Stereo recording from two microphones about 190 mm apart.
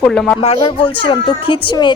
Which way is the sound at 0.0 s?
5° left (ahead or behind).